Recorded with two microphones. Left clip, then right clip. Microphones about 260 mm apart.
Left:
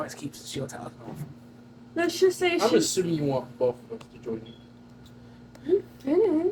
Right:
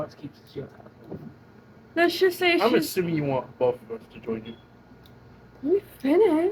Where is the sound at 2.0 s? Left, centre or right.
Right.